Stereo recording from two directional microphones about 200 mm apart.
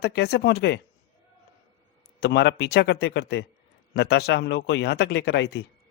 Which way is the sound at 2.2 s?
60° left (ahead or behind).